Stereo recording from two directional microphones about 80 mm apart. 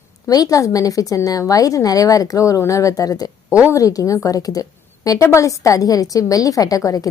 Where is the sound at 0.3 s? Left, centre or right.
Left.